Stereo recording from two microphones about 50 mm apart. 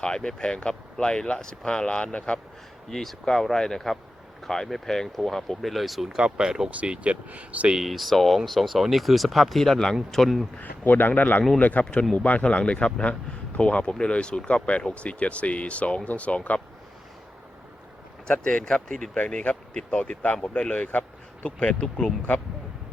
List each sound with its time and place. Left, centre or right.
0.0 s speech: centre
2.9 s speech: centre
6.2 s speech: centre
7.9 s speech: centre
10.6 s speech: left
18.3 s speech: centre